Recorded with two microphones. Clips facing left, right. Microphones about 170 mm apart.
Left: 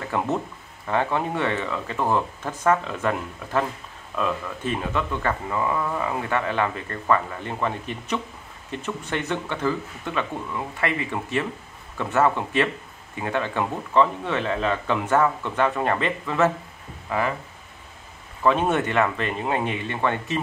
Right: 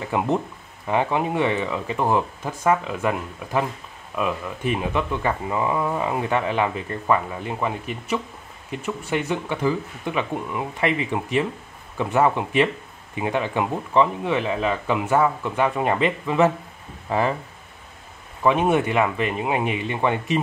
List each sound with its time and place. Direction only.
0.0 s speech: 15° right (ahead or behind)
17.1 s speech: 30° right (ahead or behind)
18.4 s speech: 10° right (ahead or behind)